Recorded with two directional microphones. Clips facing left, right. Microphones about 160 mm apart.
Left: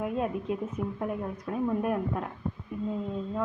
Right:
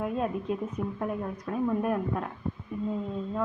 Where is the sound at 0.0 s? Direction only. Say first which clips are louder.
Even; 15° left (ahead or behind).